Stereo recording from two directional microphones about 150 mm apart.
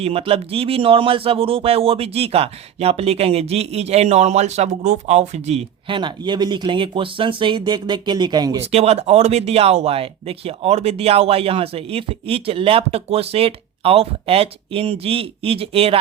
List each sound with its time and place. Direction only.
0.0 s speech: 40° right (ahead or behind)
6.0 s speech: 30° right (ahead or behind)
8.7 s speech: 45° right (ahead or behind)